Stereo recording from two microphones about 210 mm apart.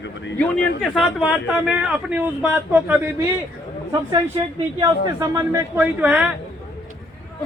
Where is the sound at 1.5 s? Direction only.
5° right (ahead or behind).